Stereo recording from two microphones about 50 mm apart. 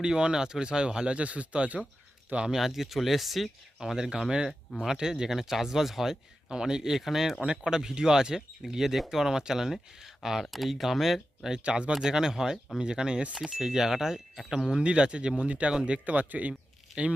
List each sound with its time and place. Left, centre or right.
0.0 s speech: centre
2.6 s speech: centre
11.6 s speech: right
15.7 s speech: centre
16.0 s speech: right